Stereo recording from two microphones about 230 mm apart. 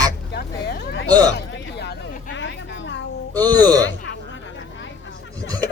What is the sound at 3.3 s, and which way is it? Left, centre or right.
Speech, centre.